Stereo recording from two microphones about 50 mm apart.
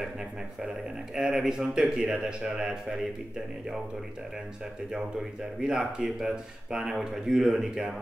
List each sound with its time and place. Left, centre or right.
0.0 s speech: centre
4.9 s speech: centre